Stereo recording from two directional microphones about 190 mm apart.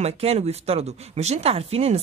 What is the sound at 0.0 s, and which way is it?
Speech, 35° right (ahead or behind).